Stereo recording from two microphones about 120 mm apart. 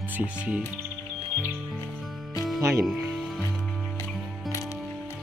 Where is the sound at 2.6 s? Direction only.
25° right (ahead or behind).